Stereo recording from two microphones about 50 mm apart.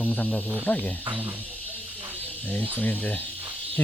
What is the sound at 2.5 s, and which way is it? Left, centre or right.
Speech, left.